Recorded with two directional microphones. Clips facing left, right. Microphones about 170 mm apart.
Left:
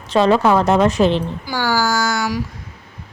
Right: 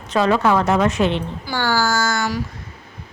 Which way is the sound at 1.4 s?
10° left (ahead or behind).